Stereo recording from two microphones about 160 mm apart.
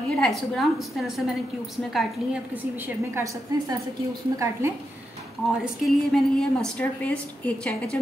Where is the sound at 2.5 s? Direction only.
10° right (ahead or behind).